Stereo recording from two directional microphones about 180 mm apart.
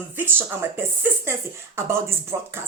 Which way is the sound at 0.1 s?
10° right (ahead or behind).